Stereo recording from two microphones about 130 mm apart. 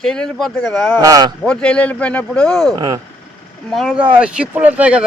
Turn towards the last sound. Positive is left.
turn(degrees=-10)  # may be behind; listen again after turning